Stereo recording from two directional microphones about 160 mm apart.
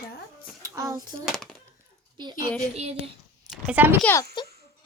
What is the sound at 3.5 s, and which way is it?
Speech, 10° right (ahead or behind).